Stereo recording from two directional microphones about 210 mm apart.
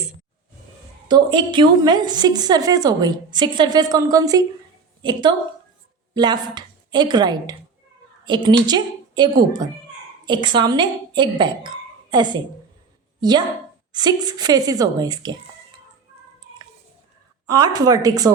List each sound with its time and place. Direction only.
1.0 s a woman's voice: 20° right (ahead or behind)
13.9 s a woman's voice: 20° right (ahead or behind)
17.4 s a woman's voice: 20° right (ahead or behind)